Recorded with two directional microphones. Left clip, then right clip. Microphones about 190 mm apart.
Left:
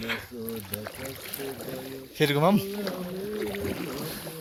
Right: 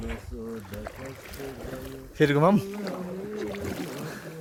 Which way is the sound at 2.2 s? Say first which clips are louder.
Right 2 dB; 55° right (ahead or behind).